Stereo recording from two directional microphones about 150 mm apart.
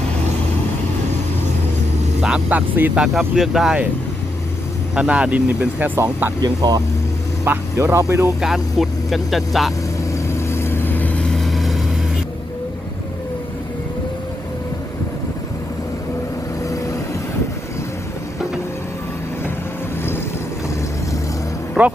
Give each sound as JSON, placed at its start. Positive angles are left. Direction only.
{"t": 2.2, "sound": "speech", "side_deg": -5}
{"t": 4.9, "sound": "speech", "side_deg": -5}
{"t": 6.4, "sound": "speech", "side_deg": -25}
{"t": 7.4, "sound": "speech", "side_deg": -15}
{"t": 8.4, "sound": "speech", "side_deg": 0}
{"t": 10.2, "sound": "vehicle", "side_deg": 15}
{"t": 16.6, "sound": "vehicle", "side_deg": 20}
{"t": 21.8, "sound": "music", "side_deg": -10}